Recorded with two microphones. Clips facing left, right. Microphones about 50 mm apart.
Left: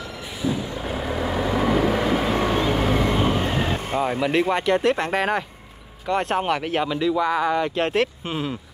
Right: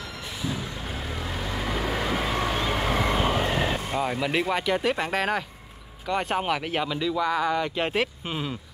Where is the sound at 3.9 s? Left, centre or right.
Centre.